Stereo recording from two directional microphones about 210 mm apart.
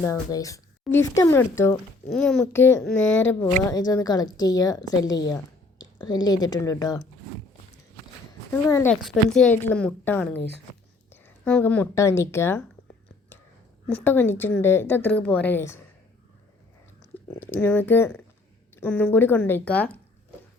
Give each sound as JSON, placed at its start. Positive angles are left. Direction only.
{"t": 0.0, "sound": "a woman's voice", "side_deg": 15}
{"t": 2.0, "sound": "speech", "side_deg": 0}
{"t": 2.5, "sound": "a woman's voice", "side_deg": 15}
{"t": 8.6, "sound": "a woman's voice", "side_deg": 10}
{"t": 9.0, "sound": "a woman's voice", "side_deg": 0}
{"t": 13.8, "sound": "a woman's voice", "side_deg": 10}
{"t": 17.4, "sound": "a woman's voice", "side_deg": 10}